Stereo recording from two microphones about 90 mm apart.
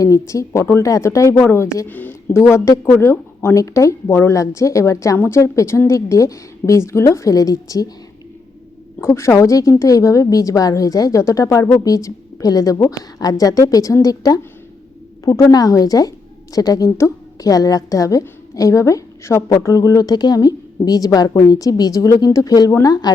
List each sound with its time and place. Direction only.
0.0 s a woman's voice: 40° left (ahead or behind)
9.0 s a woman's voice: 30° left (ahead or behind); by 23.1 s 50° left (ahead or behind)